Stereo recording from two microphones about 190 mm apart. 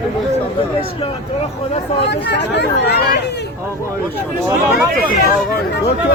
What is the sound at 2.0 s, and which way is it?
Speech, 60° left (ahead or behind).